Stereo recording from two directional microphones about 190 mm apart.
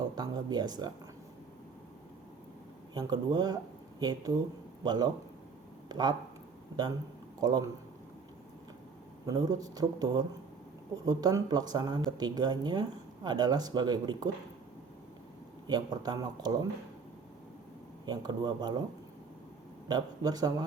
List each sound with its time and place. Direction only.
0.2 s speech: 20° right (ahead or behind)
2.9 s a man's voice: 20° right (ahead or behind)
7.3 s speech: 20° right (ahead or behind)
9.2 s speech: 20° right (ahead or behind)
15.6 s speech: 20° right (ahead or behind)
18.0 s speech: 20° right (ahead or behind)
19.9 s speech: 20° right (ahead or behind)